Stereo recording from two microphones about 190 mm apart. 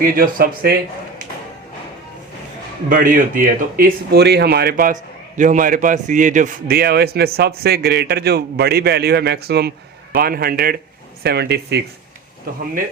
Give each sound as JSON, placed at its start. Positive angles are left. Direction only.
{"t": 0.0, "sound": "speech", "side_deg": -50}
{"t": 2.9, "sound": "a man's voice", "side_deg": -45}